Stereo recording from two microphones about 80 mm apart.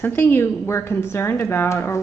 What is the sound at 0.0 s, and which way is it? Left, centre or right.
A woman's voice, left.